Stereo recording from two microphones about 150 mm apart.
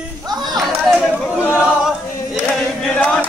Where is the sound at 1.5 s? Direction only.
5° right (ahead or behind).